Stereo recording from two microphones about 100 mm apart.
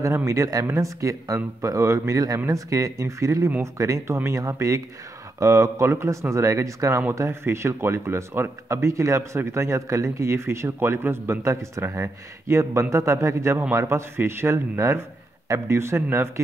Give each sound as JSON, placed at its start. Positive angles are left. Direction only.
{"t": 0.0, "sound": "speech", "side_deg": -30}